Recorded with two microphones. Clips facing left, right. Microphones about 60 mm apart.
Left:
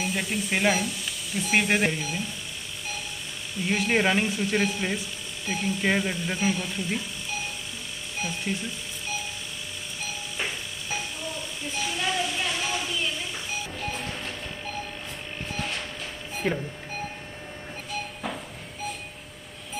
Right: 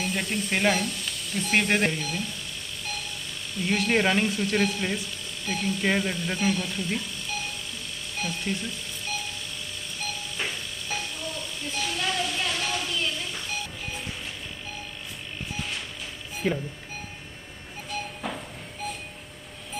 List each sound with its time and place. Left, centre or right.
0.0 s speech: centre
3.5 s speech: centre
8.2 s music: centre
10.0 s train: centre
16.4 s speech: centre
17.9 s chink: centre